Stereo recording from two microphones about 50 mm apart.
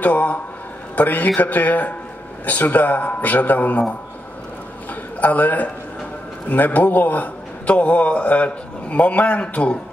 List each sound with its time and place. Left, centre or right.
0.0 s a man's voice: left
5.2 s a man's voice: left